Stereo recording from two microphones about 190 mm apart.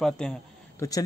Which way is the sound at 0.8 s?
20° left (ahead or behind).